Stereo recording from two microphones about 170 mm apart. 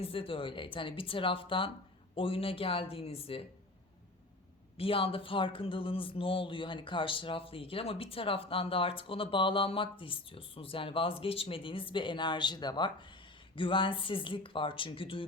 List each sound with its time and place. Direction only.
0.0 s speech: 35° left (ahead or behind)
4.8 s speech: 35° left (ahead or behind)